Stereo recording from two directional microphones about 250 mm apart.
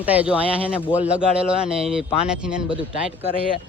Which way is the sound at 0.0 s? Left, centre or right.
Centre.